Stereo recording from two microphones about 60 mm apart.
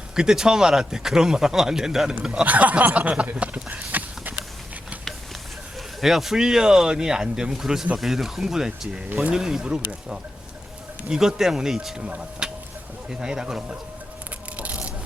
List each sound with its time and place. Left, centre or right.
0.2 s speech: centre
2.5 s speech: right
3.8 s run: right
6.0 s speech: centre
14.5 s patter: right